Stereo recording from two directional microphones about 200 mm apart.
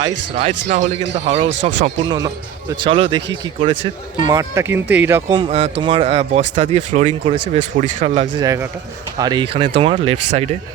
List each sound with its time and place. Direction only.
0.3 s speech: 30° right (ahead or behind)
2.0 s speech: 20° right (ahead or behind)
5.3 s speech: 30° right (ahead or behind)